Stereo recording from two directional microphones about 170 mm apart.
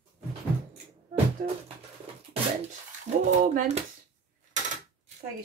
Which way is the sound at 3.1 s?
45° right (ahead or behind).